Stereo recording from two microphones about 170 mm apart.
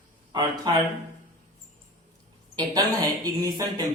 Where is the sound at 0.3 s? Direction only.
25° right (ahead or behind).